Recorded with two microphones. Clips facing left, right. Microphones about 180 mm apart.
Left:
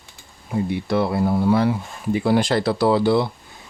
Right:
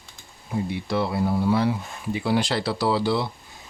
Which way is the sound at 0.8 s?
55° left (ahead or behind).